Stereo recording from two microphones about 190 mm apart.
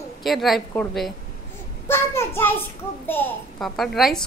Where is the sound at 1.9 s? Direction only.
10° left (ahead or behind).